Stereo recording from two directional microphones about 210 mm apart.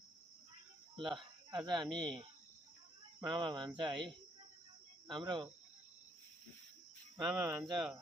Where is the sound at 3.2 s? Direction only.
20° right (ahead or behind).